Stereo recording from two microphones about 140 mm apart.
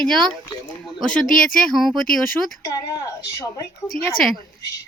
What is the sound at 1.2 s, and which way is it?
Speech, 75° left (ahead or behind).